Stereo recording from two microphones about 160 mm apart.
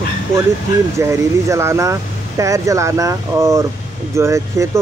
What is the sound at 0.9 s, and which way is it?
Speech, 20° right (ahead or behind).